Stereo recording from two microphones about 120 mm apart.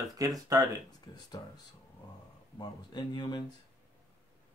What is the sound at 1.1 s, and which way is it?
Speech, 40° left (ahead or behind).